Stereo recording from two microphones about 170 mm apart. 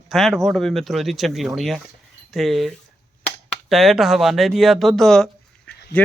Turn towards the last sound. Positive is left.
turn(degrees=75)  # may be behind; listen again after turning